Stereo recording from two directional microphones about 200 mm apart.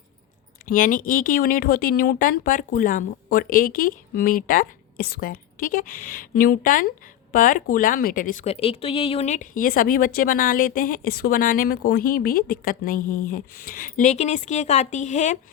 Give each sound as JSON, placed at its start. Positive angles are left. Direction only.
{"t": 0.6, "sound": "speech", "side_deg": 45}